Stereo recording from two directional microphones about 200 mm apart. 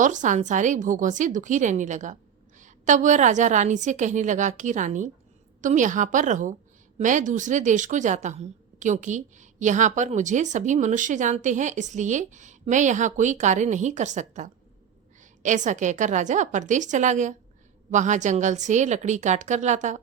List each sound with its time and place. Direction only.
0.0 s a woman's voice: 40° right (ahead or behind)